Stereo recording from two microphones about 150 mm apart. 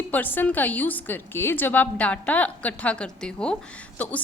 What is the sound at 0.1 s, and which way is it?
A woman's voice, 10° left (ahead or behind).